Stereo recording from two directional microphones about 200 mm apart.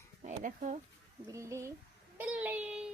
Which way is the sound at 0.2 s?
40° right (ahead or behind).